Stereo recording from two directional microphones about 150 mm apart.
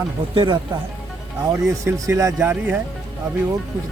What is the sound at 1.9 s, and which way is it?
Speech, 20° right (ahead or behind).